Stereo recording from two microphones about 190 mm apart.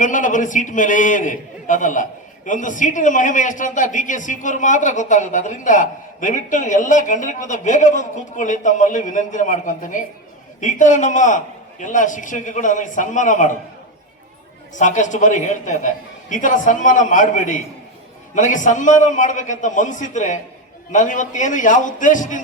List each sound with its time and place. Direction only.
0.0 s a man's voice: 40° left (ahead or behind)
14.8 s a man's voice: 40° left (ahead or behind)